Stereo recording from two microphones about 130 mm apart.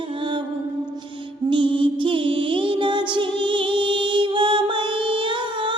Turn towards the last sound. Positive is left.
turn(degrees=-40)  # may be behind; listen again after turning